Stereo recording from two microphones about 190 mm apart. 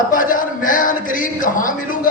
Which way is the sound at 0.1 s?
45° left (ahead or behind).